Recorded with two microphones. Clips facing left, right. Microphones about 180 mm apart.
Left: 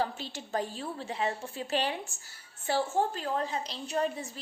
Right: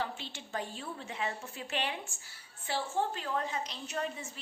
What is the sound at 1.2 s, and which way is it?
A woman's voice, 35° left (ahead or behind).